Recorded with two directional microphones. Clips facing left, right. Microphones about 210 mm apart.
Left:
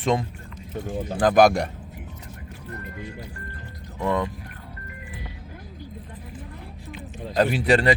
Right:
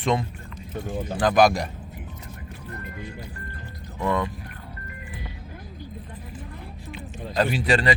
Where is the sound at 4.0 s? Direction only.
30° left (ahead or behind).